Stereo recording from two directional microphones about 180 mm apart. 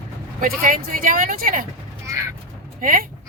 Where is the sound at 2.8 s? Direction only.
50° right (ahead or behind).